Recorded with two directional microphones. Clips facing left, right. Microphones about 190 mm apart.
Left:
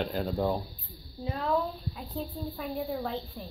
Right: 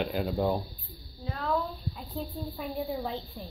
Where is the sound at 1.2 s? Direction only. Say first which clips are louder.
Left 2 dB; 15° left (ahead or behind).